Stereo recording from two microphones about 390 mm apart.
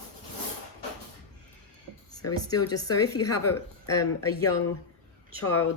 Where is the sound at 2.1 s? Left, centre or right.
Centre.